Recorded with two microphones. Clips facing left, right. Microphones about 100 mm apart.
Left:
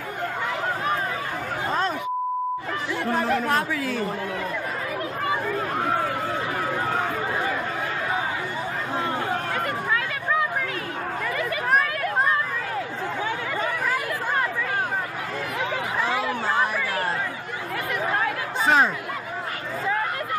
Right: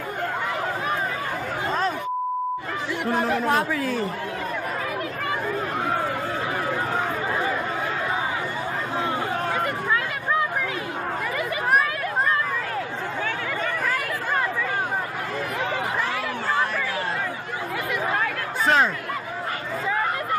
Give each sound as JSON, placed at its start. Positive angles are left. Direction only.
{"t": 3.2, "sound": "speech", "side_deg": -15}
{"t": 11.3, "sound": "chatter", "side_deg": -5}
{"t": 16.1, "sound": "a sound", "side_deg": 20}
{"t": 18.1, "sound": "chatter", "side_deg": 5}